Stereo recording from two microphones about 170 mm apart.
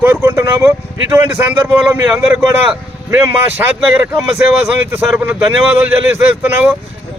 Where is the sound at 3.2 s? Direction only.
15° right (ahead or behind).